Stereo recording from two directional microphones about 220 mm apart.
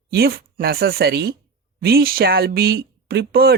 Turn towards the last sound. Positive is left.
turn(degrees=-45)  # may be behind; listen again after turning